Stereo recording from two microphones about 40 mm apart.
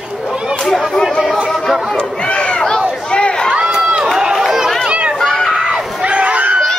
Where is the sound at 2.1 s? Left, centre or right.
Left.